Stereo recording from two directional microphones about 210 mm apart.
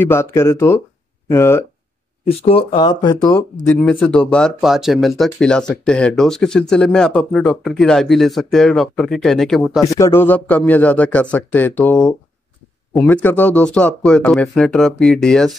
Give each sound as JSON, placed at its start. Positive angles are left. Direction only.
{"t": 0.0, "sound": "a man's voice", "side_deg": 10}
{"t": 2.2, "sound": "speech", "side_deg": 25}
{"t": 3.3, "sound": "speech", "side_deg": 5}
{"t": 9.8, "sound": "a man's voice", "side_deg": 15}